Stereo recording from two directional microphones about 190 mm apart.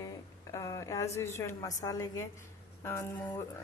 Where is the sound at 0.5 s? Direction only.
15° left (ahead or behind).